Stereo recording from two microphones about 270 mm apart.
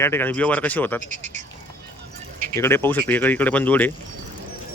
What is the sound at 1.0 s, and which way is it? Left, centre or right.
Speech, right.